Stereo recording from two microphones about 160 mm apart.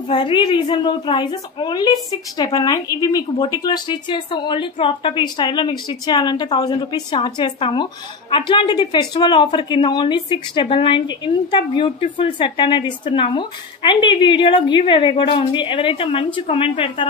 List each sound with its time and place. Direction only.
0.1 s a woman's voice: 30° left (ahead or behind)